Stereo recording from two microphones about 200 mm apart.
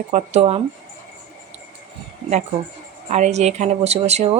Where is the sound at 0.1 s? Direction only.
35° right (ahead or behind).